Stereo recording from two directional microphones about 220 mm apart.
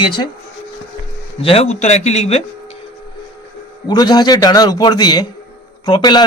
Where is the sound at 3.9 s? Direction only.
20° left (ahead or behind).